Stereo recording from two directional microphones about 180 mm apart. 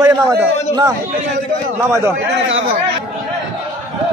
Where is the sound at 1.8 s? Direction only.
15° right (ahead or behind).